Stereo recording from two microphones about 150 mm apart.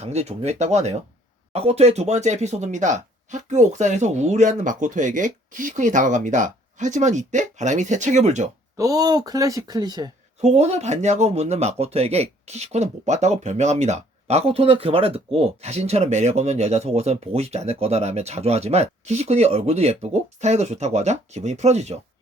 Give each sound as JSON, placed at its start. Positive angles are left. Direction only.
{"t": 0.0, "sound": "speech", "side_deg": -45}
{"t": 8.8, "sound": "speech", "side_deg": -25}
{"t": 10.4, "sound": "speech", "side_deg": -50}